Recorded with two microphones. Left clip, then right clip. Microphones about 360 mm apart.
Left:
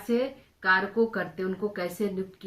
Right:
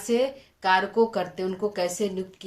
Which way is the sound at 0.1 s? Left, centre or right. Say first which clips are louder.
Right 4 dB; centre.